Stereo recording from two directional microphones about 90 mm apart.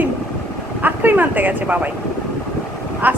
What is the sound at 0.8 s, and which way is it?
Speech, 20° right (ahead or behind).